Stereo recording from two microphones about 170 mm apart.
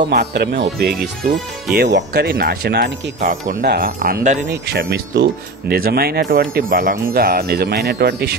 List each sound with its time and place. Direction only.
0.1 s speech: 75° right (ahead or behind)
3.2 s speech: 50° right (ahead or behind)
3.6 s speech: 65° right (ahead or behind); by 4.5 s 45° right (ahead or behind)
4.5 s speech: 75° right (ahead or behind)